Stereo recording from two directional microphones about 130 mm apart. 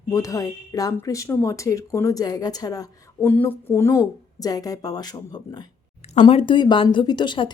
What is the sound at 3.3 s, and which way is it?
A woman's voice, 15° left (ahead or behind).